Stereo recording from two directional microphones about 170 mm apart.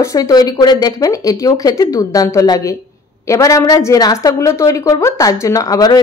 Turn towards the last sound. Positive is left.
turn(degrees=20)  # may be behind; listen again after turning